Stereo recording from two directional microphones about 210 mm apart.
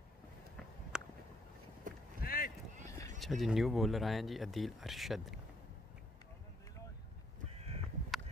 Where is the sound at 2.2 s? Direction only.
45° left (ahead or behind).